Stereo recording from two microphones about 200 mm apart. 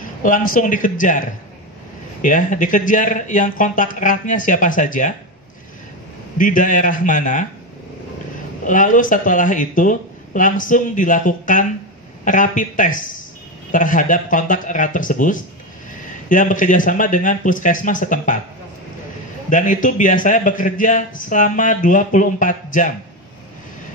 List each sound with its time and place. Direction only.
0.2 s a man's voice: 45° left (ahead or behind)
6.3 s a man's voice: 40° left (ahead or behind)
8.6 s a man's voice: 40° left (ahead or behind)
19.5 s a man's voice: 40° left (ahead or behind)